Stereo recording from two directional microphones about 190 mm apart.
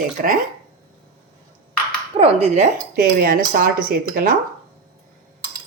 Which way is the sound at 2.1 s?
30° right (ahead or behind).